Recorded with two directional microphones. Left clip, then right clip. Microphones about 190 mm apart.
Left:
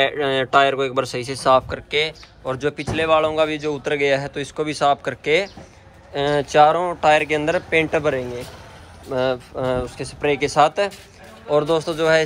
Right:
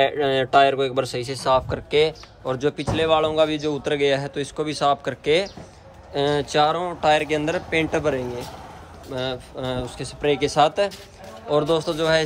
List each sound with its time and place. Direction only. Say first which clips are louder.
0.0 s speech: left 1 dB; 5° right (ahead or behind)
1.7 s speech: right 2 dB; 20° right (ahead or behind)
2.5 s speech: even; 10° right (ahead or behind)
9.1 s speech: left 7 dB; 5° left (ahead or behind)